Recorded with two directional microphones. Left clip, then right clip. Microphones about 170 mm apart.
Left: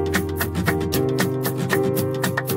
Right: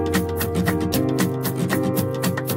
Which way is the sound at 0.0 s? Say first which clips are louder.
Even; centre (ahead or behind).